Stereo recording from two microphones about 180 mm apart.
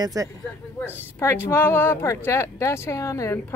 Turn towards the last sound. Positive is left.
turn(degrees=15)  # may be behind; listen again after turning